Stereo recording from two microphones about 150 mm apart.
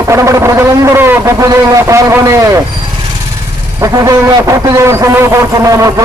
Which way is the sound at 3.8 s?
20° right (ahead or behind).